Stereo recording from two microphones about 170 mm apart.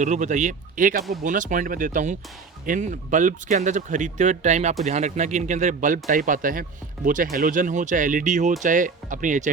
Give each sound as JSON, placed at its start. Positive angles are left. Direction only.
{"t": 0.0, "sound": "speech", "side_deg": -45}